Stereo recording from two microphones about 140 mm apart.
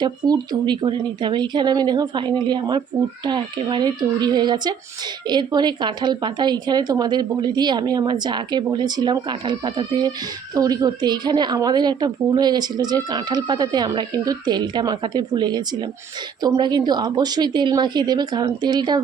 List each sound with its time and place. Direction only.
0.0 s a woman's voice: 30° right (ahead or behind)